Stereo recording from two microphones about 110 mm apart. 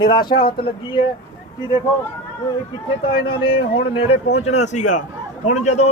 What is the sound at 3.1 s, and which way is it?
A man's voice, 55° left (ahead or behind).